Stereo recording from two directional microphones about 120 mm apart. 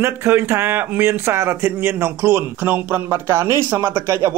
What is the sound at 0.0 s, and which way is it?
Speech, 20° right (ahead or behind).